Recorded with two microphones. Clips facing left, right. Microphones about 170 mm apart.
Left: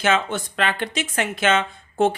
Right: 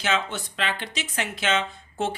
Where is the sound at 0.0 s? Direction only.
50° left (ahead or behind).